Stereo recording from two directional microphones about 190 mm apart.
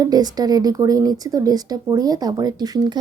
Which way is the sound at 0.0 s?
20° right (ahead or behind).